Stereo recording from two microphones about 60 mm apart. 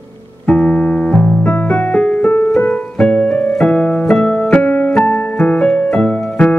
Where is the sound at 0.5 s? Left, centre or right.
Centre.